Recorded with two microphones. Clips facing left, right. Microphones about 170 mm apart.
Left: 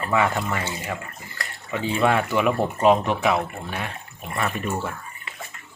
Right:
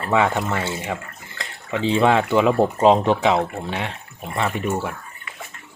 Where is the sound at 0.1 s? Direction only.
20° right (ahead or behind).